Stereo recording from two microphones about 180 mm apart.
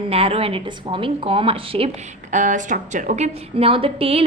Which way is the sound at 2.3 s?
45° right (ahead or behind).